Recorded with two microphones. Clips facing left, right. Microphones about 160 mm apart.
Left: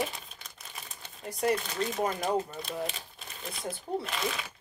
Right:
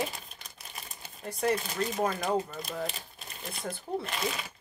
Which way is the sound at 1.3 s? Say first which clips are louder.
Even; 15° left (ahead or behind).